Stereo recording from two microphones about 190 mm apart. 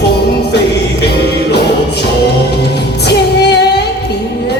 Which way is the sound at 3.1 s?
60° left (ahead or behind).